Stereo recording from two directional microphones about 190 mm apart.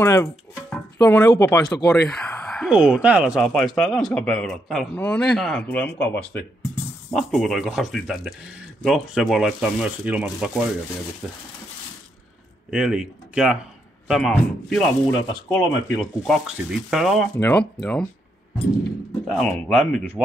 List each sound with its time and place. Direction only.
0.0 s speech: 15° left (ahead or behind)
2.0 s speech: 5° left (ahead or behind)
12.7 s speech: 5° right (ahead or behind)
17.4 s speech: 10° left (ahead or behind)
19.2 s speech: centre (ahead or behind)